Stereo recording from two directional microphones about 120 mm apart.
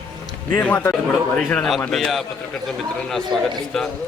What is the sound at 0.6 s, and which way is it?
A man's voice, 15° left (ahead or behind).